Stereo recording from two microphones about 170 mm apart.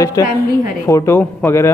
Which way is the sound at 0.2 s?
20° left (ahead or behind).